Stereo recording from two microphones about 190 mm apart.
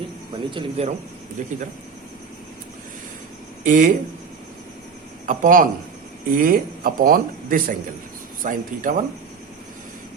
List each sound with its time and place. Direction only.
0.5 s speech: 35° right (ahead or behind)
3.6 s speech: 45° right (ahead or behind)
5.2 s speech: 45° right (ahead or behind)